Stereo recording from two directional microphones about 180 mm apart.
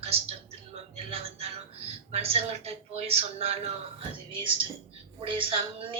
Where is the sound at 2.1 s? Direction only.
35° right (ahead or behind).